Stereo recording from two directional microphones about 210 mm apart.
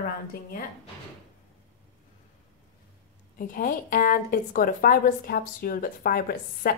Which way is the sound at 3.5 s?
40° left (ahead or behind).